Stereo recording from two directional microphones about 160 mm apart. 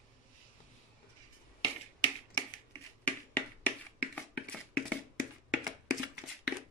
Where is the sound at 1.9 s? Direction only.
30° left (ahead or behind).